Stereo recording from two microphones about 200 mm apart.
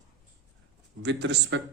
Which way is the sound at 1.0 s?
60° right (ahead or behind).